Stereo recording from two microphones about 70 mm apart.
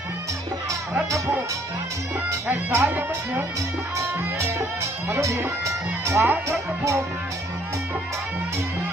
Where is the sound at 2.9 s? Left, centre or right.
Right.